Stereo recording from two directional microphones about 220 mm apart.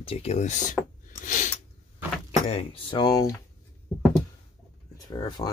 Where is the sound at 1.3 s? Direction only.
35° left (ahead or behind).